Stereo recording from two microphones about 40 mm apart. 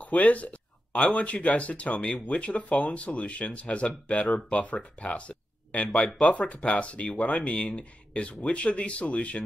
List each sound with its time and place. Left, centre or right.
0.0 s speech: left